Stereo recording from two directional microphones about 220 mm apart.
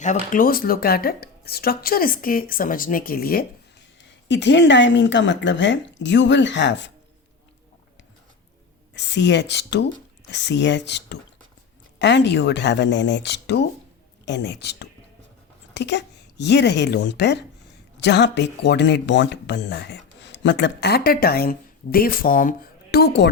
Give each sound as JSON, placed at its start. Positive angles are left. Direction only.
{"t": 0.0, "sound": "speech", "side_deg": 35}
{"t": 4.3, "sound": "speech", "side_deg": 55}
{"t": 9.0, "sound": "a woman's voice", "side_deg": 50}